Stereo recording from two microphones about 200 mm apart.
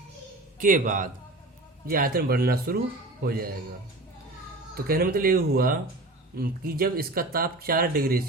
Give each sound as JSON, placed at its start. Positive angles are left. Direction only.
{"t": 0.6, "sound": "speech", "side_deg": -40}
{"t": 4.7, "sound": "speech", "side_deg": -50}